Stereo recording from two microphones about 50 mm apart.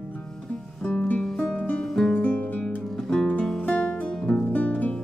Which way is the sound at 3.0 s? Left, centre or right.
Centre.